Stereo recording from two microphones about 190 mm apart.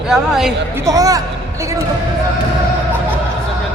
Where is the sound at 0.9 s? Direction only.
20° right (ahead or behind).